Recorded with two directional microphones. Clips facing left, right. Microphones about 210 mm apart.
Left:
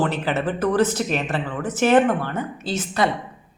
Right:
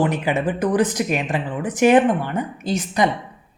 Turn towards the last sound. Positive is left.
turn(degrees=-15)  # may be behind; listen again after turning